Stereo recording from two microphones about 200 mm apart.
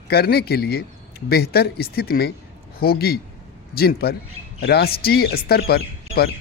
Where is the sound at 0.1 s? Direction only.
50° left (ahead or behind).